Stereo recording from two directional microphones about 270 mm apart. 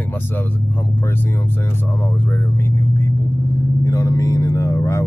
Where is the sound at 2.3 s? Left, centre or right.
Centre.